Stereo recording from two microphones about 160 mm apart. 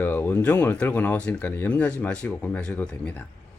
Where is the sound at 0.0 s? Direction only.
10° left (ahead or behind).